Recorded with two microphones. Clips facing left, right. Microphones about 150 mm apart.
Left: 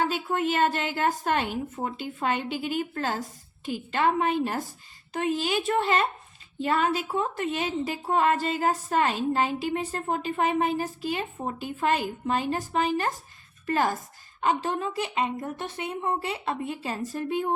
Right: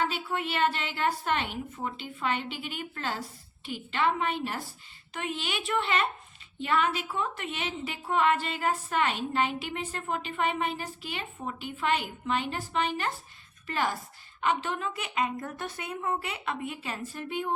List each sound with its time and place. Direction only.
0.0 s a woman's voice: 45° left (ahead or behind)